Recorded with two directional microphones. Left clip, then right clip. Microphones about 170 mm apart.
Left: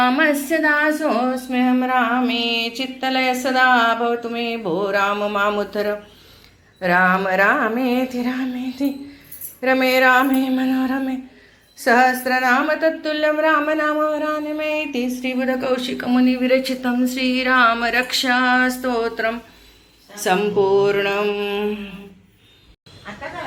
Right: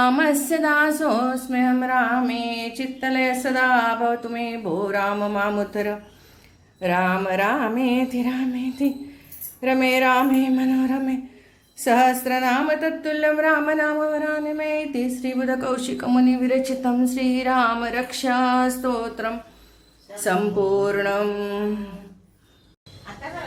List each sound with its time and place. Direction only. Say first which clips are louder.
0.0 s speech: left 2 dB; 20° right (ahead or behind)
1.5 s mantra: left 2 dB; 20° right (ahead or behind)
11.8 s speech: left 3 dB; 25° right (ahead or behind)
15.1 s mantra: left 3 dB; 20° right (ahead or behind)
17.8 s a sound: left 6 dB; centre (ahead or behind)
18.2 s mantra: left 2 dB; 20° right (ahead or behind)
20.1 s speech: left 3 dB; 20° right (ahead or behind)
20.6 s mantra: left 6 dB; 20° right (ahead or behind)
21.0 s speech: left 3 dB; 20° right (ahead or behind)